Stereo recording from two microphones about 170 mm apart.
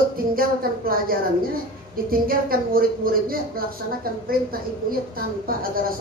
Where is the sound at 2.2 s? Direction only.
60° right (ahead or behind).